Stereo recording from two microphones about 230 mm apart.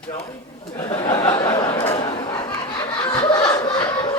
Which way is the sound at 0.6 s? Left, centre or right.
Left.